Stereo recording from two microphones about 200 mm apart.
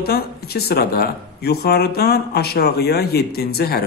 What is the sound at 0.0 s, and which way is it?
Speech, 50° left (ahead or behind).